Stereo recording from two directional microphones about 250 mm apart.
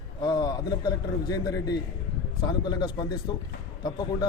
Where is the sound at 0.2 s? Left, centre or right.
Centre.